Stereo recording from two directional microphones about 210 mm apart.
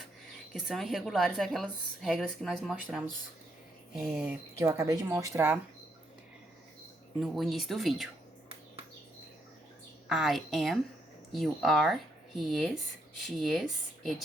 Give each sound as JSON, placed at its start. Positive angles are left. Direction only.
{"t": 0.5, "sound": "a woman's voice", "side_deg": 0}
{"t": 4.1, "sound": "speech", "side_deg": -10}
{"t": 7.2, "sound": "a woman's voice", "side_deg": 0}
{"t": 10.1, "sound": "a woman's voice", "side_deg": 0}